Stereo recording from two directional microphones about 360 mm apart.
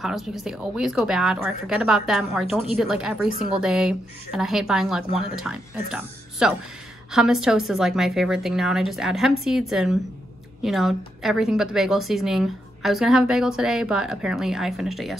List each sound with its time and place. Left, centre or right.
0.0 s a woman's voice: centre